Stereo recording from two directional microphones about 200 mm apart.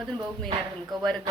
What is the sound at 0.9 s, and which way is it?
Speech, 20° right (ahead or behind).